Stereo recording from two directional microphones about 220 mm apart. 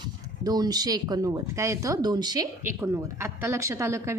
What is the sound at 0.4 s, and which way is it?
Speech, 15° right (ahead or behind).